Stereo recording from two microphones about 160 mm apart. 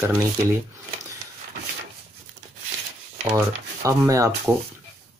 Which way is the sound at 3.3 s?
20° right (ahead or behind).